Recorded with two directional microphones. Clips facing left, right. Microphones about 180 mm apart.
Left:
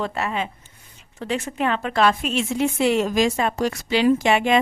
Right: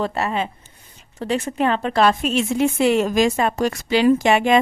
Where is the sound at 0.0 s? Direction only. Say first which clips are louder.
Right 3 dB; 35° right (ahead or behind).